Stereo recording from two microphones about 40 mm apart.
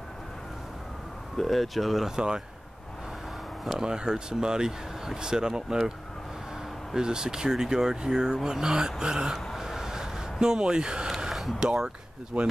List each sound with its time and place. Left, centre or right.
1.3 s speech: centre
2.1 s speech: centre
3.8 s speech: centre
7.0 s speech: centre
9.6 s a sound: centre
11.2 s a sound: centre
11.6 s speech: centre